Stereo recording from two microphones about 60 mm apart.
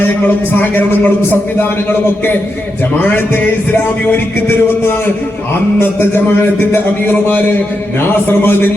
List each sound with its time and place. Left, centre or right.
0.5 s music: left
3.0 s music: left